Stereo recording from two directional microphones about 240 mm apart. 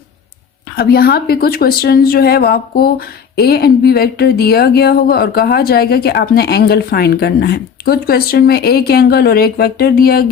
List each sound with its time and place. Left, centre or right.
0.8 s a woman's voice: left